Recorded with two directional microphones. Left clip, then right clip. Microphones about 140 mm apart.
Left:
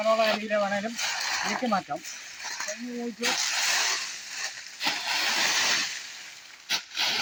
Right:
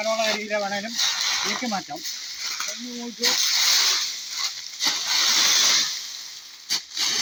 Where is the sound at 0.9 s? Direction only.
25° right (ahead or behind).